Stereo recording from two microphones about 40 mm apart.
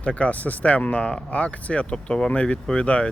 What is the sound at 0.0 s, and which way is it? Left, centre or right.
Speech, left.